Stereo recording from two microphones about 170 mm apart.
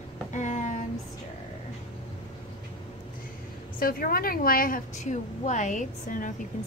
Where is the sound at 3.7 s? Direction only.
60° left (ahead or behind).